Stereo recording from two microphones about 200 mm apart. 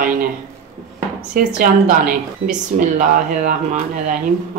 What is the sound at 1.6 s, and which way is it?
A woman's voice, 45° right (ahead or behind).